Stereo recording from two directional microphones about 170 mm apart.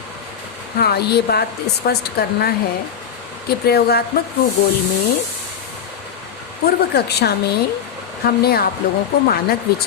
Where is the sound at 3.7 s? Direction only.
70° left (ahead or behind).